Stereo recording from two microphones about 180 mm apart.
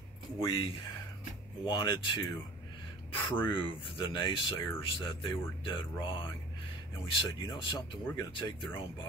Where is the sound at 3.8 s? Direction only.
25° left (ahead or behind).